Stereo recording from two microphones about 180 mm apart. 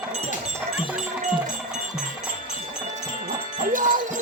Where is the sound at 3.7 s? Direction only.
45° right (ahead or behind).